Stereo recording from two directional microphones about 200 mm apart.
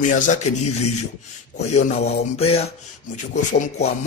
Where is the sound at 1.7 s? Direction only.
35° left (ahead or behind).